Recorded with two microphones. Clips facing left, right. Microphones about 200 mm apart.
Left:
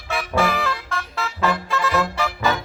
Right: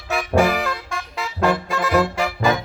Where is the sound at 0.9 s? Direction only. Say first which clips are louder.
Left 1 dB; 15° right (ahead or behind).